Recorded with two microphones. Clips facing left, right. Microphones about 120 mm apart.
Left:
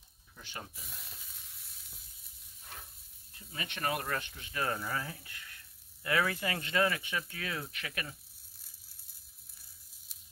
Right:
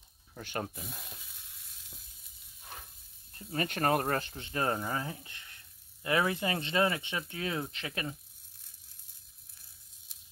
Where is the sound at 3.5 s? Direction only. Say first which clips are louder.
Right 7 dB; 45° right (ahead or behind); by 8.2 s 25° right (ahead or behind).